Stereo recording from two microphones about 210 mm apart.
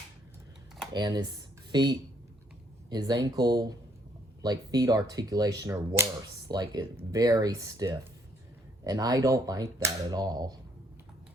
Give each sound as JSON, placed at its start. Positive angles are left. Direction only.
{"t": 0.9, "sound": "speech", "side_deg": -20}